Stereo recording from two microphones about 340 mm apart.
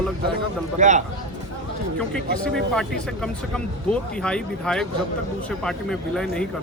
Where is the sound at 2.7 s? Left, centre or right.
Centre.